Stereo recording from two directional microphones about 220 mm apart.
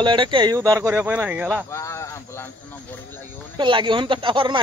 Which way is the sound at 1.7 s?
15° left (ahead or behind).